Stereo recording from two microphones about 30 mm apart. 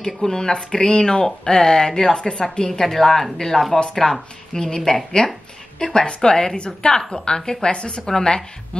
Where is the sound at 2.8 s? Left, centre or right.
Centre.